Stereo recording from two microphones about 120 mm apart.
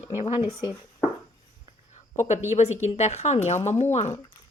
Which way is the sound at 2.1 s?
80° left.